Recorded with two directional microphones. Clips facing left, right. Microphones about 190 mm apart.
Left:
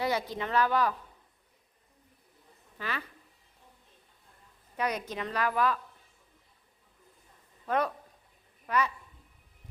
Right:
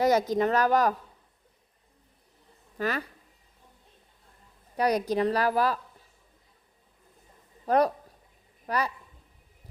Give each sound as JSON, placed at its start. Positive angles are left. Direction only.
{"t": 0.0, "sound": "speech", "side_deg": -40}
{"t": 2.7, "sound": "a woman's voice", "side_deg": -40}
{"t": 4.8, "sound": "a woman's voice", "side_deg": -35}
{"t": 7.6, "sound": "a man's voice", "side_deg": -40}